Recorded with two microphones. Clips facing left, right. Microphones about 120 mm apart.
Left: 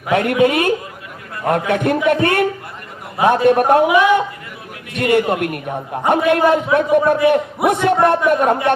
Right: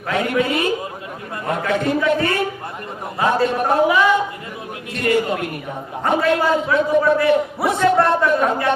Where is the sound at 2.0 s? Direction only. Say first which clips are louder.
Left 4 dB; 60° left (ahead or behind).